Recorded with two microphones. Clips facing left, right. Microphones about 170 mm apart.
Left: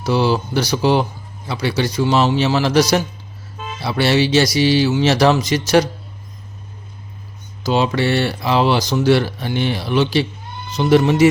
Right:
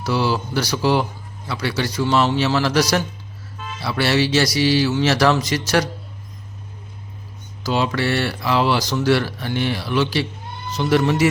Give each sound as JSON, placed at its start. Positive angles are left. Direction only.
{"t": 0.0, "sound": "speech", "side_deg": 20}
{"t": 7.6, "sound": "speech", "side_deg": 20}